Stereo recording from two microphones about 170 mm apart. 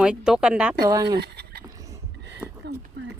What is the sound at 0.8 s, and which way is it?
Speech, 20° right (ahead or behind).